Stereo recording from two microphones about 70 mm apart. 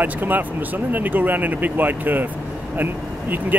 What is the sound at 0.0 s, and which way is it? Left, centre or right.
Speech, right.